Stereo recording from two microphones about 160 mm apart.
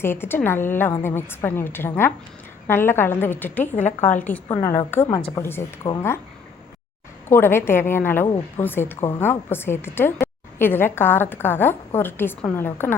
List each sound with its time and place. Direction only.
0.0 s a woman's voice: 15° left (ahead or behind)
4.4 s a woman's voice: 25° left (ahead or behind)
4.9 s a woman's voice: 10° left (ahead or behind)
7.3 s a woman's voice: 15° left (ahead or behind)